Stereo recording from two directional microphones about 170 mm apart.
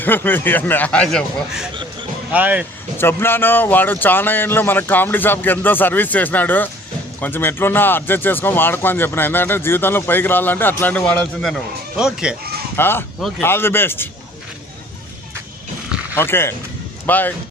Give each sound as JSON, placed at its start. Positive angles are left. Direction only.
{"t": 0.0, "sound": "speech", "side_deg": 10}
{"t": 1.7, "sound": "a sound", "side_deg": -30}
{"t": 2.3, "sound": "speech", "side_deg": -10}
{"t": 3.0, "sound": "speech", "side_deg": 15}
{"t": 12.7, "sound": "speech", "side_deg": 15}
{"t": 16.1, "sound": "speech", "side_deg": 15}